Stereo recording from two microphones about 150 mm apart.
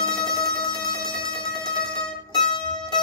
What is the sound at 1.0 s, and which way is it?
Mandolin, 30° left (ahead or behind).